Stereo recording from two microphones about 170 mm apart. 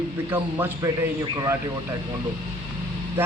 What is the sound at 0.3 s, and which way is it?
Speech, 15° right (ahead or behind).